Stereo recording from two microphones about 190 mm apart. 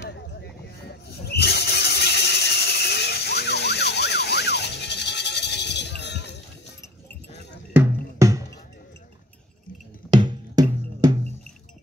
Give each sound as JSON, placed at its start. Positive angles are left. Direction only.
{"t": 0.4, "sound": "a sound", "side_deg": 60}
{"t": 7.7, "sound": "music", "side_deg": -15}
{"t": 10.1, "sound": "music", "side_deg": -20}